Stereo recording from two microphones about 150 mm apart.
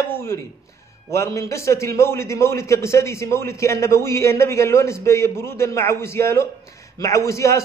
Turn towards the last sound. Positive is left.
turn(degrees=20)  # may be behind; listen again after turning